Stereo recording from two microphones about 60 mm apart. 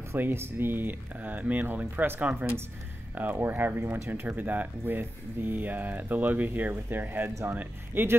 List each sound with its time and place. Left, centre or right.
0.2 s speech: right